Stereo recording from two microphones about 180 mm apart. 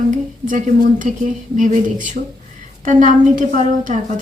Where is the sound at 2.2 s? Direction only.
55° right (ahead or behind).